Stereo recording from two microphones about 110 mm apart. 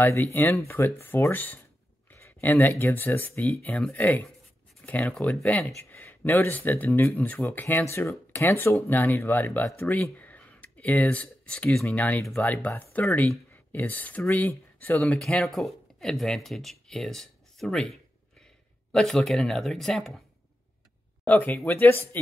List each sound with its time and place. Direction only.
0.0 s speech: 20° left (ahead or behind)
15.1 s speech: 5° left (ahead or behind)
21.3 s speech: 15° left (ahead or behind)